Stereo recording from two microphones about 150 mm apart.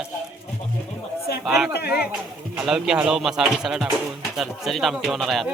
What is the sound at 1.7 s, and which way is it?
Speech, 90° left.